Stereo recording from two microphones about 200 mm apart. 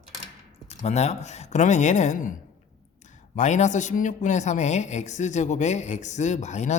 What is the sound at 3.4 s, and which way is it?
Speech, 35° left (ahead or behind).